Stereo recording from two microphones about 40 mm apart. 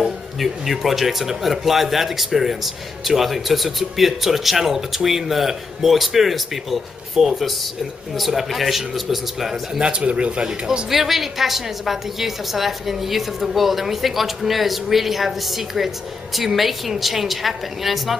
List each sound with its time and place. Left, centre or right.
0.0 s speech: centre
9.8 s speech: right
10.9 s speech: centre